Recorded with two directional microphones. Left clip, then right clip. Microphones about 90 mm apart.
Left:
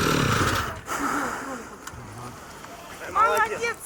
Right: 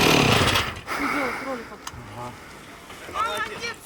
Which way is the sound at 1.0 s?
Centre (ahead or behind).